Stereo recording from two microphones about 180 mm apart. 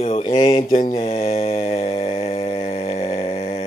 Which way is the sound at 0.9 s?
35° left (ahead or behind).